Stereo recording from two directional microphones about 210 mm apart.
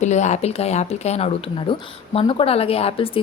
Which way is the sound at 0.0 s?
35° left (ahead or behind).